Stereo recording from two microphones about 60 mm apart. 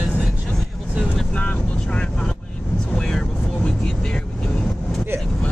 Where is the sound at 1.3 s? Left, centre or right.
Centre.